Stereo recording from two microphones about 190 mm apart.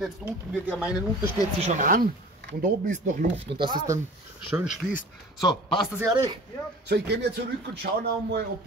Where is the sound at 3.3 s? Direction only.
25° right (ahead or behind).